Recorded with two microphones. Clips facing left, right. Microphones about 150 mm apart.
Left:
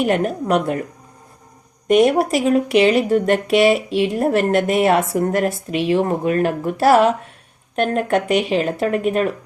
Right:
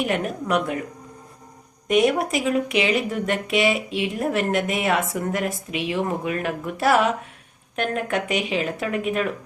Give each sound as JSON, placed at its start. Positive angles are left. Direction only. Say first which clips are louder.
{"t": 0.0, "sound": "speech", "louder": "left 6 dB", "side_deg": 40}
{"t": 1.9, "sound": "speech", "louder": "left 5 dB", "side_deg": 40}